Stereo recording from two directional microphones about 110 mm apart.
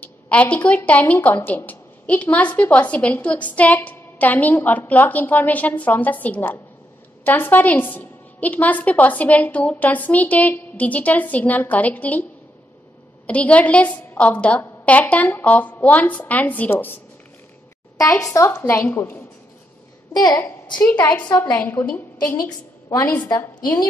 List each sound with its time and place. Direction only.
0.0 s a woman's voice: 10° left (ahead or behind)
13.3 s a woman's voice: 10° left (ahead or behind)
18.2 s a woman's voice: 25° left (ahead or behind)
18.5 s a woman's voice: 15° left (ahead or behind)
20.1 s a woman's voice: 40° left (ahead or behind)
20.8 s a woman's voice: 15° left (ahead or behind)
22.4 s a woman's voice: 30° left (ahead or behind)